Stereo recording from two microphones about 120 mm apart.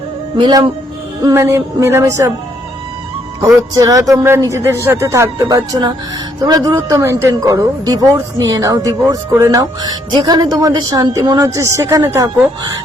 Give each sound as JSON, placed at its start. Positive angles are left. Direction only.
{"t": 0.3, "sound": "a woman's voice", "side_deg": -40}
{"t": 1.2, "sound": "speech", "side_deg": -25}
{"t": 3.8, "sound": "a woman's voice", "side_deg": -30}